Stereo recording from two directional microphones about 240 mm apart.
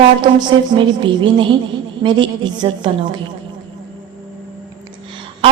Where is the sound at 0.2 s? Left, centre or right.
Centre.